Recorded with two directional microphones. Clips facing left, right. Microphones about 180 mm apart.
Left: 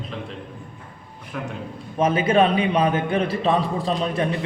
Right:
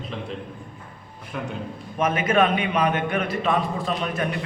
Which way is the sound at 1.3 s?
Centre (ahead or behind).